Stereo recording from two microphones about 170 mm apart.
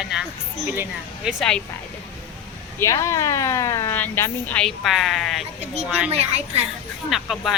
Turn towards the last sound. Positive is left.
turn(degrees=0)  # may be behind; listen again after turning